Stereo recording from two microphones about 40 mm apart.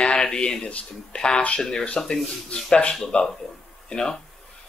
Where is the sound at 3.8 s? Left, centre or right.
Centre.